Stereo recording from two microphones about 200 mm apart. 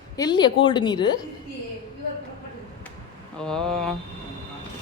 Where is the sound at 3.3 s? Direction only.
5° left (ahead or behind).